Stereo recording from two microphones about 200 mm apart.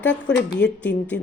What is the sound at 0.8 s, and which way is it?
Speech, 5° left (ahead or behind).